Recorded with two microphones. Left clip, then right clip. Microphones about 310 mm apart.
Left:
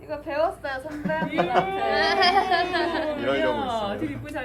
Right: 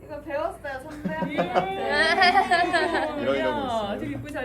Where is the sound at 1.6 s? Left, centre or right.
Centre.